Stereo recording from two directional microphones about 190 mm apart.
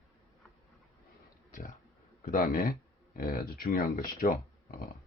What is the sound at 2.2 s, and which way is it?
Speech, 45° left (ahead or behind).